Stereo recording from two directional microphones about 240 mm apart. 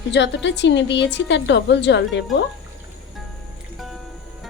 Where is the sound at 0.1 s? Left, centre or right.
Left.